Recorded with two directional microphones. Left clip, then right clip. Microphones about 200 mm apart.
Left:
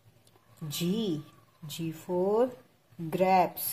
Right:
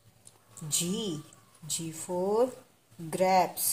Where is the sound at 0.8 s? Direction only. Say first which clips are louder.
Left 3 dB; 15° left (ahead or behind).